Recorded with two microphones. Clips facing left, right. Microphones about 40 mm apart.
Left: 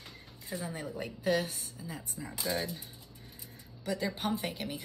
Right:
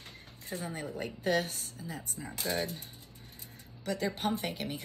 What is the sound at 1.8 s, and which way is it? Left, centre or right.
Speech, centre.